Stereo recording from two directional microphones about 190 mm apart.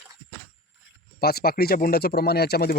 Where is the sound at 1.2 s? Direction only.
55° left (ahead or behind).